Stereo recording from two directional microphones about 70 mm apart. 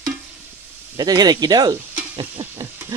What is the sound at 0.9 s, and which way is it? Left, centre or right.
Speech, right.